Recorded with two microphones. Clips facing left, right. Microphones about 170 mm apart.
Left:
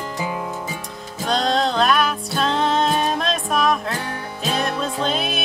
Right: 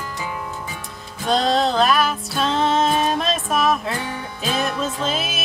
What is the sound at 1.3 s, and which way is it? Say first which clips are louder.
Music: right 2 dB; centre (ahead or behind).